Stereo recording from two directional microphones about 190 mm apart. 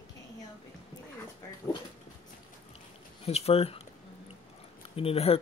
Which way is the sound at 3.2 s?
30° left (ahead or behind).